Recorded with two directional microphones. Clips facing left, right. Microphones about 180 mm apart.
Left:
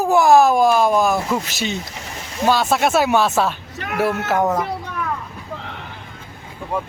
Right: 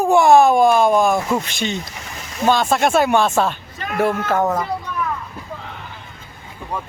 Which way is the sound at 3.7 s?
70° left (ahead or behind).